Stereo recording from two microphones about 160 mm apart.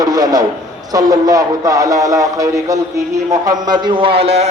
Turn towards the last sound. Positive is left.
turn(degrees=-40)  # may be behind; listen again after turning